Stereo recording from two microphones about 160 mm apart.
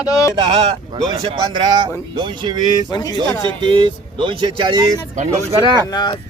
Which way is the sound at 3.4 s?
30° right (ahead or behind).